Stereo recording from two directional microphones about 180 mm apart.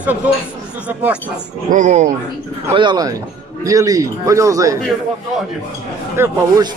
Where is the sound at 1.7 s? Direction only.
40° right (ahead or behind).